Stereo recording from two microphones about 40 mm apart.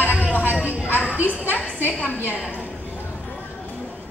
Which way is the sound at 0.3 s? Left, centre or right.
Left.